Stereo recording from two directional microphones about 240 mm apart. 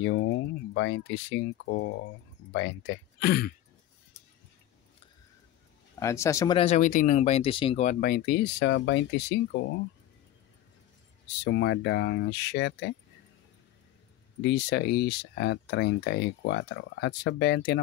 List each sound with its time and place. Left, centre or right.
0.0 s speech: left
5.9 s speech: centre; by 9.8 s left
11.4 s speech: left
14.4 s speech: left